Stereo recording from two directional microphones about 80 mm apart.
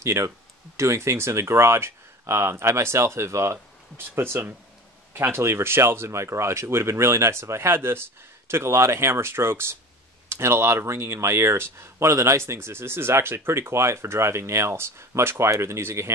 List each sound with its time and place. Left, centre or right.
0.0 s speech: right